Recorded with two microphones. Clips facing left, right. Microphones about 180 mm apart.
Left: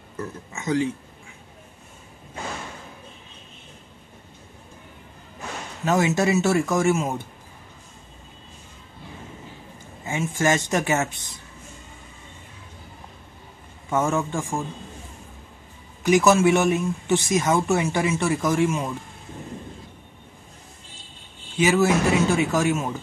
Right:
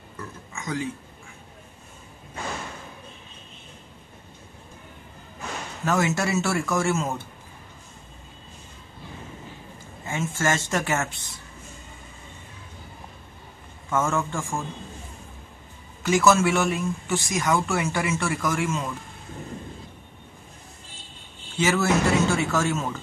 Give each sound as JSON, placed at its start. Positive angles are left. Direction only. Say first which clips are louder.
{"t": 0.5, "sound": "speech", "louder": "left 7 dB", "side_deg": 25}
{"t": 5.9, "sound": "speech", "louder": "left 3 dB", "side_deg": 20}
{"t": 10.0, "sound": "speech", "louder": "left 3 dB", "side_deg": 15}
{"t": 13.8, "sound": "speech", "louder": "left 2 dB", "side_deg": 15}
{"t": 16.0, "sound": "speech", "louder": "left 3 dB", "side_deg": 20}
{"t": 21.5, "sound": "speech", "louder": "left 3 dB", "side_deg": 15}